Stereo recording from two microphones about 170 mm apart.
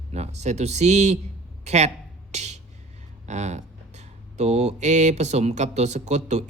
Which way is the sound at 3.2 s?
40° right (ahead or behind).